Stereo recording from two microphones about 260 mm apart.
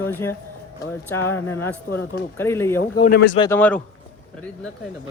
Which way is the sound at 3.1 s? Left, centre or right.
Left.